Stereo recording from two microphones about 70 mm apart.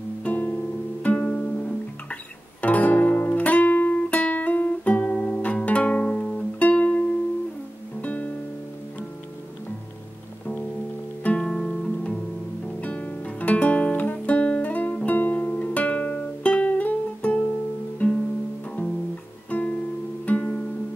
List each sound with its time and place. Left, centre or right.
0.2 s music: left
11.2 s music: centre
12.8 s guitar: centre
15.0 s music: left
19.5 s music: left
20.2 s music: centre